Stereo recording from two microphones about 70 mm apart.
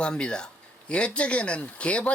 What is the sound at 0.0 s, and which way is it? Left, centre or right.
A man's voice, centre.